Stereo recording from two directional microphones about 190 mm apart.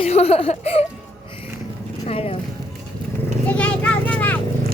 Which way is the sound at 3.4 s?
5° left (ahead or behind).